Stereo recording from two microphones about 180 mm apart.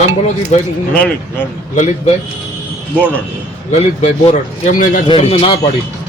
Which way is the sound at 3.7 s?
40° left (ahead or behind).